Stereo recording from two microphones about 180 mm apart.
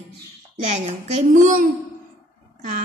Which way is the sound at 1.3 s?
50° right (ahead or behind).